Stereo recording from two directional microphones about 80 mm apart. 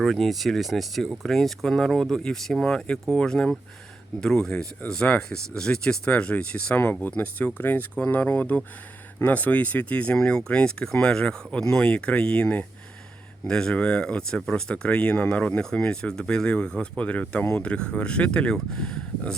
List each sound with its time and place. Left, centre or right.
0.0 s speech: centre